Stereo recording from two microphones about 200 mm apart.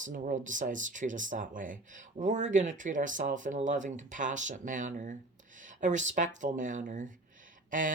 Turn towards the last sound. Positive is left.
turn(degrees=-40)  # may be behind; listen again after turning